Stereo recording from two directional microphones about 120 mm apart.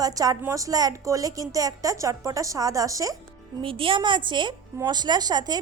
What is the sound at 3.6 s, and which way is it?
A woman's voice, 45° right (ahead or behind).